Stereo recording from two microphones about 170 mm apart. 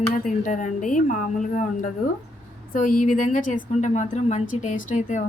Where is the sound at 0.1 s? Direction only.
50° left (ahead or behind).